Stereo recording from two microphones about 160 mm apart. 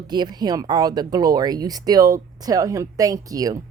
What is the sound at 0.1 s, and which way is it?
Speech, 25° right (ahead or behind).